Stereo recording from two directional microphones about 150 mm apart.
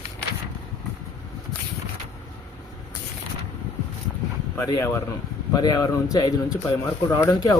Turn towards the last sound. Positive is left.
turn(degrees=25)  # may be behind; listen again after turning